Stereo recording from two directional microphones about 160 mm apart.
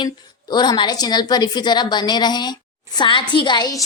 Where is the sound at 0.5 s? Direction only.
25° left (ahead or behind).